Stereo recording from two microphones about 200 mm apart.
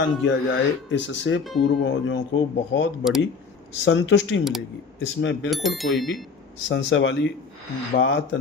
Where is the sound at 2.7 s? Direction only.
70° left (ahead or behind).